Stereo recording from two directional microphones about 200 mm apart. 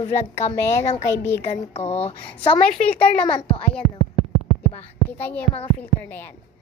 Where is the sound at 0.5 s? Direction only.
15° left (ahead or behind).